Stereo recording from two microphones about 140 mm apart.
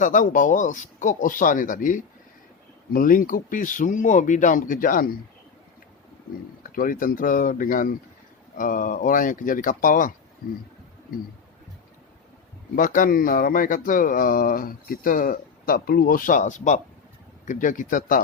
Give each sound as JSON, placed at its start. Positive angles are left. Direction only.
{"t": 0.0, "sound": "speech", "side_deg": 70}
{"t": 6.6, "sound": "speech", "side_deg": 80}
{"t": 12.7, "sound": "speech", "side_deg": 80}